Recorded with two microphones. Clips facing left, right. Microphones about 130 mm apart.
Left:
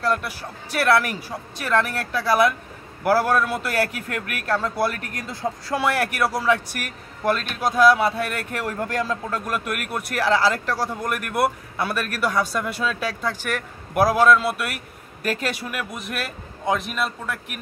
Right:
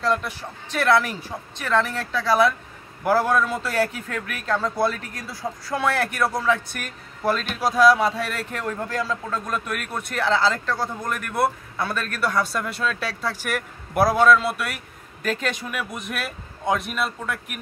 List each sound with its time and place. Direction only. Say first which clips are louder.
0.0 s speech: even; 5° left (ahead or behind)
5.2 s speech: left 4 dB; 20° left (ahead or behind)
5.8 s speech: even; 10° left (ahead or behind)